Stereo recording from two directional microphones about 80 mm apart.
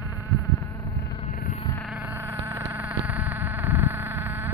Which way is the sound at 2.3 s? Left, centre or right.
Right.